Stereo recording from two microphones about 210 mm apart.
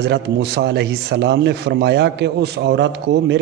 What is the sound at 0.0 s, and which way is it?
Speech, 50° right (ahead or behind).